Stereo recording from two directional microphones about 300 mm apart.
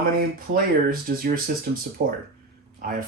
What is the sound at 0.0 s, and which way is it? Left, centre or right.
Speech, right.